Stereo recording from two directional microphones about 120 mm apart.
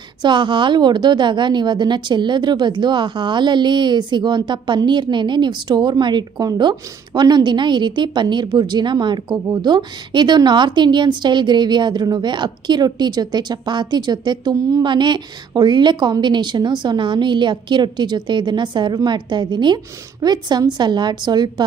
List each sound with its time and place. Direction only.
0.2 s a woman's voice: 40° right (ahead or behind)